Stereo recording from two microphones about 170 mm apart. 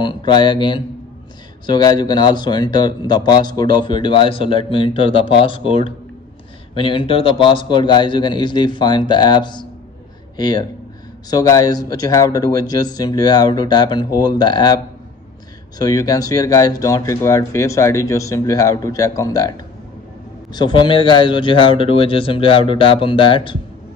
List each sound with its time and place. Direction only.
0.0 s speech: 25° left (ahead or behind)
15.8 s a man's voice: 20° left (ahead or behind)